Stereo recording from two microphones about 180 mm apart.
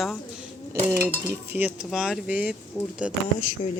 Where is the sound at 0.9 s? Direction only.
15° right (ahead or behind).